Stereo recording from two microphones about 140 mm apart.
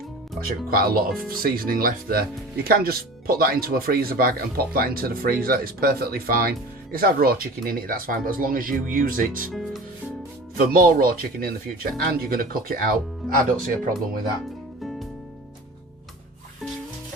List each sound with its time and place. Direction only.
0.4 s speech: 90° right
9.5 s speech: centre (ahead or behind)
10.7 s speech: 90° right
13.6 s speech: 75° right (ahead or behind)